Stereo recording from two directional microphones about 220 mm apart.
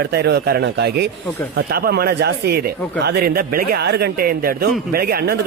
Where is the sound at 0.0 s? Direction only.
50° right (ahead or behind).